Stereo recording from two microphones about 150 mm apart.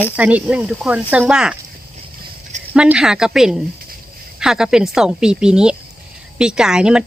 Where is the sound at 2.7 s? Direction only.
5° right (ahead or behind).